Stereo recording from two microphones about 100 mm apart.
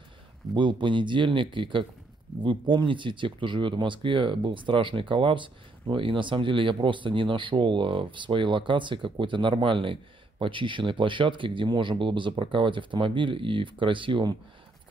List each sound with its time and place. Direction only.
0.6 s speech: 55° right (ahead or behind)